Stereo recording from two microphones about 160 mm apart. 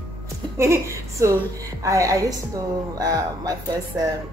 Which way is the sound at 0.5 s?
15° right (ahead or behind).